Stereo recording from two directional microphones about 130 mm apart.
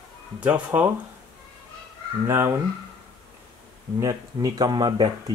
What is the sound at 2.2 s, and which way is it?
Speech, 20° right (ahead or behind).